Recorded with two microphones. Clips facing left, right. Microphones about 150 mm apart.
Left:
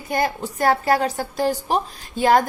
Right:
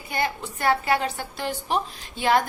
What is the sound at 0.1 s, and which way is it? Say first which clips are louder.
A woman's voice: left 5 dB; 40° left (ahead or behind).